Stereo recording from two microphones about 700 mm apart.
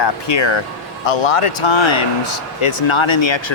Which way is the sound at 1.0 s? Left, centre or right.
Left.